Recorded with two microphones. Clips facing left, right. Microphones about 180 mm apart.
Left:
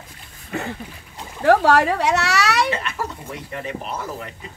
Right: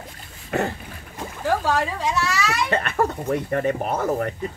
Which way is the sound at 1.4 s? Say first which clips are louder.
Left 7 dB; 70° left (ahead or behind).